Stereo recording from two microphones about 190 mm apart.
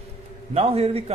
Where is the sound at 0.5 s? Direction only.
30° right (ahead or behind).